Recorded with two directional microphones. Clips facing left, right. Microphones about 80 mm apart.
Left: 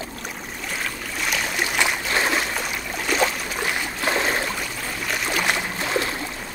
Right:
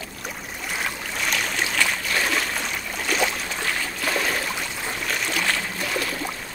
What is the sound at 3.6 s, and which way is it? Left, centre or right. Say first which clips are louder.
Stream: left 3 dB; centre.